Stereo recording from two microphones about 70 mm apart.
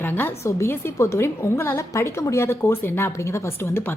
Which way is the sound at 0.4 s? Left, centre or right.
Left.